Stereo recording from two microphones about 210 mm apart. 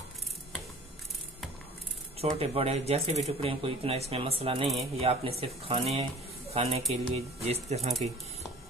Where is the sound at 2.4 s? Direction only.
30° right (ahead or behind).